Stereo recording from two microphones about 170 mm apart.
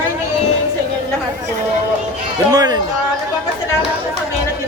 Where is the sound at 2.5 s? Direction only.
25° right (ahead or behind).